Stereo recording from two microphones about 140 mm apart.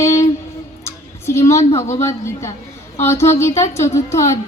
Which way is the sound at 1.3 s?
20° left (ahead or behind).